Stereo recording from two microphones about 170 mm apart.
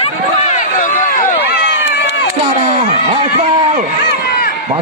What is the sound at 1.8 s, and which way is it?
Crowd, 90° left.